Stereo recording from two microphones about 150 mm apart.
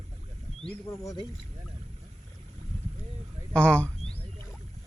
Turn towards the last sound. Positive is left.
turn(degrees=10)  # may be behind; listen again after turning